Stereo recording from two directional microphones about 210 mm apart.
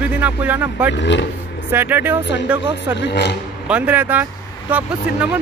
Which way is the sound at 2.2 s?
55° left (ahead or behind).